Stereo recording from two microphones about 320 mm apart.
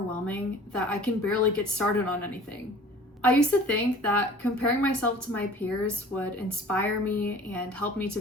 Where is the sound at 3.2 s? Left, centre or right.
Centre.